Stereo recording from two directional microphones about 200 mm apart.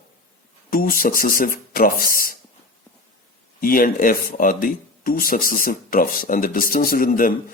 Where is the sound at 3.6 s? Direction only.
45° left (ahead or behind).